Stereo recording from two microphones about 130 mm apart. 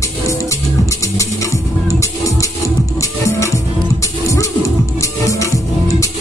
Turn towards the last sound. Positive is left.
turn(degrees=25)  # may be behind; listen again after turning